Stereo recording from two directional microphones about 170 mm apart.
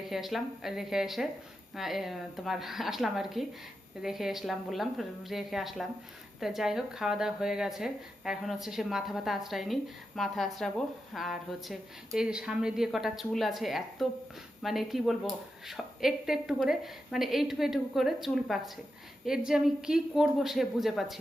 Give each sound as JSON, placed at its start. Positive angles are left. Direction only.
{"t": 0.1, "sound": "a woman's voice", "side_deg": 0}